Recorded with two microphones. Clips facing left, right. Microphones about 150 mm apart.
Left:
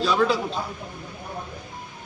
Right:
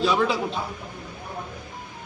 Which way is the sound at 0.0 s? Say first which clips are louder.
Left 1 dB; 20° right (ahead or behind).